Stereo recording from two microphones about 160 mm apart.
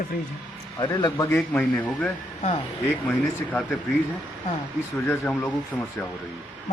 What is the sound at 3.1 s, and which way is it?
Speech, 10° left (ahead or behind).